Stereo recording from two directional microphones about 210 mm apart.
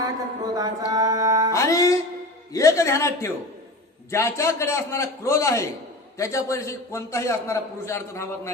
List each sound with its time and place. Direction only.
0.0 s speech: 15° right (ahead or behind)
1.5 s music: 15° left (ahead or behind)
2.5 s a man's voice: 15° left (ahead or behind)